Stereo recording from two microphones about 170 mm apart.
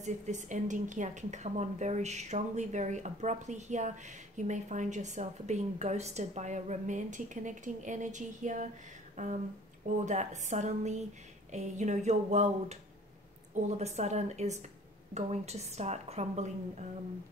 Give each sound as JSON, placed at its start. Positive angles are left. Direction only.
{"t": 0.0, "sound": "a woman's voice", "side_deg": -45}
{"t": 9.1, "sound": "a sound", "side_deg": -45}
{"t": 9.8, "sound": "a woman's voice", "side_deg": -45}